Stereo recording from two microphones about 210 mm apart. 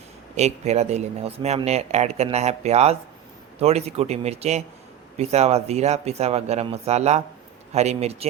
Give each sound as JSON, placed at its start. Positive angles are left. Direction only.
{"t": 0.3, "sound": "speech", "side_deg": -30}